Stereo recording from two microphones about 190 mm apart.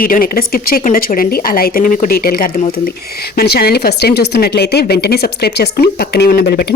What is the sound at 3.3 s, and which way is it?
A woman's voice, 55° left (ahead or behind).